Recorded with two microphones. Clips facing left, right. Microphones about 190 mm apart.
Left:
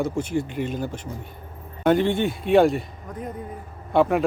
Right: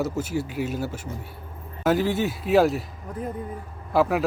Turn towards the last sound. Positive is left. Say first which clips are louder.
# left 2 dB
turn(degrees=0)  # may be behind; listen again after turning